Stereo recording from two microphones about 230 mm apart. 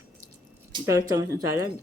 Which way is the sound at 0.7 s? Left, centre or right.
Centre.